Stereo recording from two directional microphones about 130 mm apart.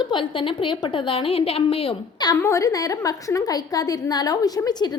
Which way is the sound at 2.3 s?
25° left (ahead or behind).